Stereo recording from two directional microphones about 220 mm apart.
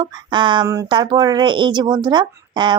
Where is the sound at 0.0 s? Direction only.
20° right (ahead or behind).